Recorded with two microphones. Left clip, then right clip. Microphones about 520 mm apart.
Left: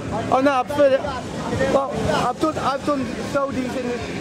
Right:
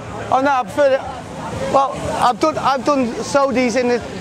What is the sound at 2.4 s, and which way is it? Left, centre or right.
Speech, right.